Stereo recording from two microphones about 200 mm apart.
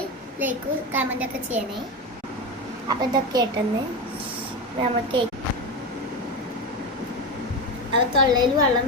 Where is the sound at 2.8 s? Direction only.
20° right (ahead or behind).